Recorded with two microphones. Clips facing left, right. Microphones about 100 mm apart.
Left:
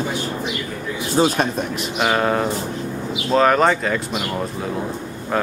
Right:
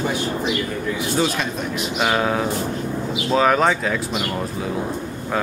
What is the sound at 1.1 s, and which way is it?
Speech, 40° left (ahead or behind).